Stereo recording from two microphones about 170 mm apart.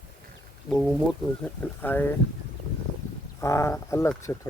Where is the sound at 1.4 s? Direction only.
10° left (ahead or behind).